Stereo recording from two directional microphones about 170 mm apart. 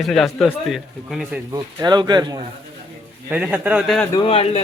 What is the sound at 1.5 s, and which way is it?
Speech, 25° right (ahead or behind).